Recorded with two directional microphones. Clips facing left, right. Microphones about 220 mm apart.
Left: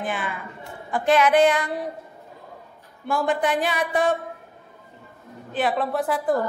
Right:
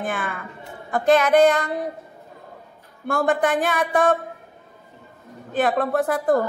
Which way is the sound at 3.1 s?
50° right (ahead or behind).